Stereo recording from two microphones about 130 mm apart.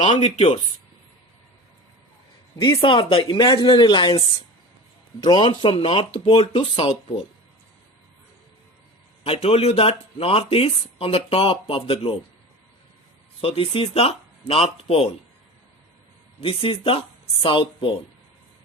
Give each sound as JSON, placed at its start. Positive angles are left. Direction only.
{"t": 0.2, "sound": "speech", "side_deg": 50}
{"t": 2.6, "sound": "speech", "side_deg": 40}
{"t": 5.2, "sound": "speech", "side_deg": 35}
{"t": 9.2, "sound": "speech", "side_deg": 50}
{"t": 13.4, "sound": "speech", "side_deg": 50}
{"t": 16.4, "sound": "speech", "side_deg": 45}